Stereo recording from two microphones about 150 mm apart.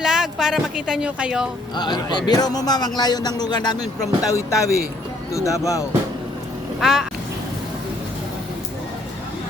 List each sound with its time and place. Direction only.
0.0 s speech: 5° right (ahead or behind)
1.7 s a man's voice: 30° left (ahead or behind)
6.7 s speech: centre (ahead or behind)